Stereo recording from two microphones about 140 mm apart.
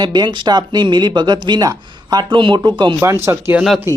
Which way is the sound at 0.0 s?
30° right (ahead or behind).